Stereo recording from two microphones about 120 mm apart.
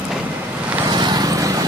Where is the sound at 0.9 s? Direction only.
40° right (ahead or behind).